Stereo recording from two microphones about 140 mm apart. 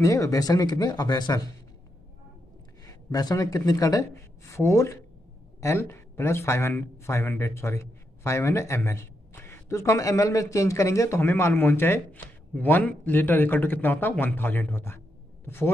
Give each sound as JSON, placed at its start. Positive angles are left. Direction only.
{"t": 0.0, "sound": "a man's voice", "side_deg": 25}
{"t": 2.9, "sound": "a man's voice", "side_deg": 25}